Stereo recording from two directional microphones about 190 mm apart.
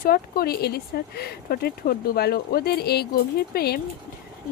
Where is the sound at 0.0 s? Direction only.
50° left (ahead or behind).